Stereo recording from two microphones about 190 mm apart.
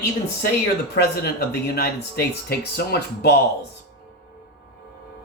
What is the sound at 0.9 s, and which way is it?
Speech, 55° left (ahead or behind).